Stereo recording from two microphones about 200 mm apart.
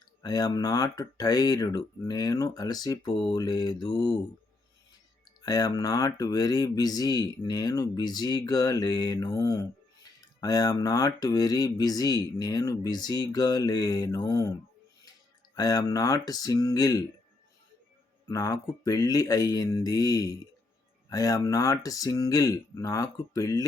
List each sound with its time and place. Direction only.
0.2 s speech: 20° left (ahead or behind)
5.4 s speech: 20° left (ahead or behind)
15.5 s speech: 20° left (ahead or behind)
18.3 s speech: 15° left (ahead or behind)